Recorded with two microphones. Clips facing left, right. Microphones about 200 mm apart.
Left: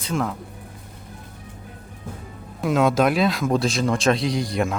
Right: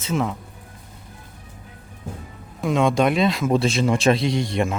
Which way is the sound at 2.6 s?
Centre (ahead or behind).